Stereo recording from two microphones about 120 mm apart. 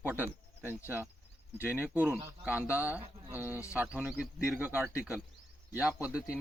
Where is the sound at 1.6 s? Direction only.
10° right (ahead or behind).